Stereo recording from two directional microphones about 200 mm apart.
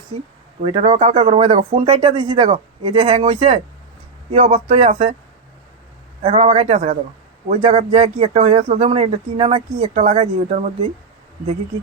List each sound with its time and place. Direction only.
0.6 s speech: 25° right (ahead or behind)
6.2 s speech: 30° right (ahead or behind)